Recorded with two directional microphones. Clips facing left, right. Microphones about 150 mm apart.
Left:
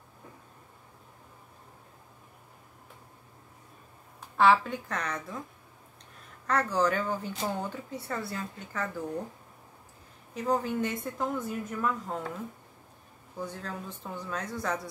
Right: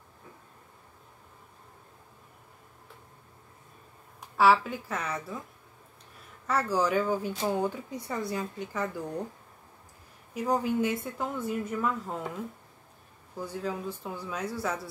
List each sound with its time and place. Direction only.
4.4 s a woman's voice: 5° right (ahead or behind)
6.4 s speech: 10° right (ahead or behind)
10.3 s speech: 10° right (ahead or behind)
13.4 s speech: 10° right (ahead or behind)